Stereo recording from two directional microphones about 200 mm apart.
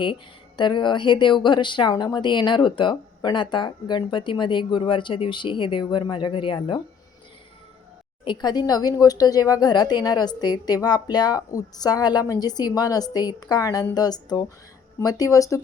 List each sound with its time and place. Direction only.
0.0 s speech: 25° left (ahead or behind)
8.2 s speech: 20° left (ahead or behind)